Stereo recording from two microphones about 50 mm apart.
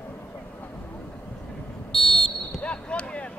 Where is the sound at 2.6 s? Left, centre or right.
Left.